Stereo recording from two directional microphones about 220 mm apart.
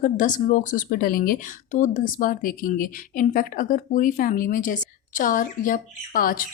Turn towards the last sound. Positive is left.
turn(degrees=40)  # may be behind; listen again after turning